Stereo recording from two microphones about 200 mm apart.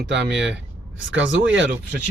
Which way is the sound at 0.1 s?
60° right (ahead or behind).